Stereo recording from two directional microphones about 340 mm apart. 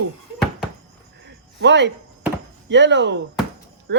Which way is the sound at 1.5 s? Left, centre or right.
Right.